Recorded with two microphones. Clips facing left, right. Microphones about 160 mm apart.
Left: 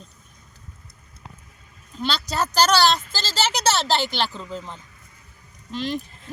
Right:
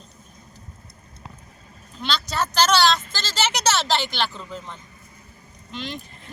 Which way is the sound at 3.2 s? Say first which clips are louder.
Left 1 dB; 35° left (ahead or behind).